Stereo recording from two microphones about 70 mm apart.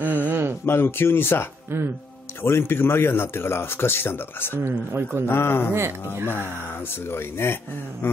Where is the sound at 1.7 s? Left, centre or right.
Right.